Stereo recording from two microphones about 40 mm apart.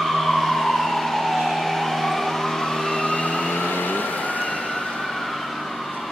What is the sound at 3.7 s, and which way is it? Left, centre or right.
Vehicle, left.